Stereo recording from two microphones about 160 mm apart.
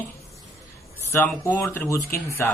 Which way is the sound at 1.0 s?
15° left (ahead or behind).